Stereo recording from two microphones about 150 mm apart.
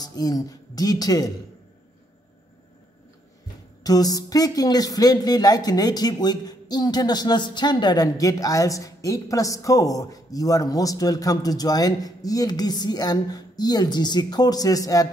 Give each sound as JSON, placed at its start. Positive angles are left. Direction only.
{"t": 0.0, "sound": "speech", "side_deg": 25}
{"t": 3.8, "sound": "speech", "side_deg": 25}